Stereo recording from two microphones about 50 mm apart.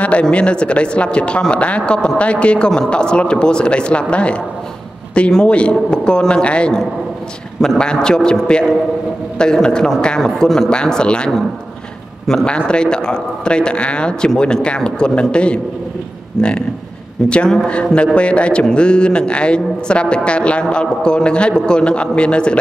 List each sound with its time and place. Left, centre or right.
0.0 s a man's voice: left
12.4 s a man's voice: centre